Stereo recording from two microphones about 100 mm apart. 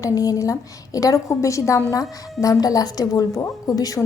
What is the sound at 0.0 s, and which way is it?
A woman's voice, 35° left (ahead or behind).